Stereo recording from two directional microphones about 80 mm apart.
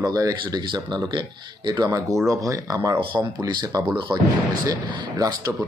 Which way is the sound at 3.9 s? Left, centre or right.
Right.